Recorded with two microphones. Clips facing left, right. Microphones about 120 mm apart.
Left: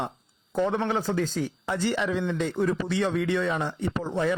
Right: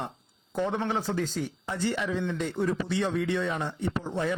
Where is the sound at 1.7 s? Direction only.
90° left.